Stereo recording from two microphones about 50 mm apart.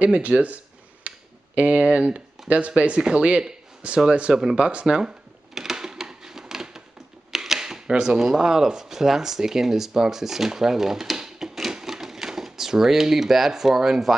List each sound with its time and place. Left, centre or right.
0.0 s speech: right
1.0 s a sound: right
3.0 s speech: centre
4.6 s speech: right
4.9 s cash register: centre
7.3 s speech: centre